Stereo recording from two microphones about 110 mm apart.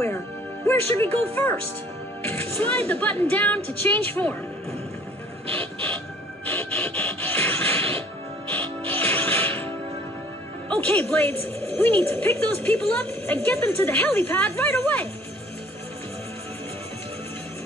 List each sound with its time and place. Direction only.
0.7 s a woman's voice: 20° left (ahead or behind)
5.5 s music: 55° right (ahead or behind)
6.4 s a sound: 15° left (ahead or behind)
8.5 s music: 15° left (ahead or behind)
10.7 s a woman's voice: 15° left (ahead or behind)